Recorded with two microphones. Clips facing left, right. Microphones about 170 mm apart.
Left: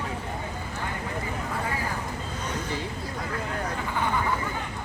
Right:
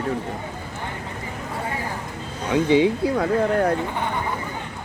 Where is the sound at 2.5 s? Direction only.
80° right.